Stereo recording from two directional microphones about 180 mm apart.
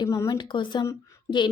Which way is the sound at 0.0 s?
20° left (ahead or behind).